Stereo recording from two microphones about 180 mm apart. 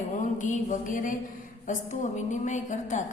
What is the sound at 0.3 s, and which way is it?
A woman's voice, 45° left (ahead or behind).